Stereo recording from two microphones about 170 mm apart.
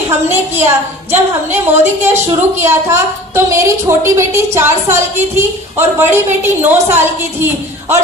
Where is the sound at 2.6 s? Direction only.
15° right (ahead or behind).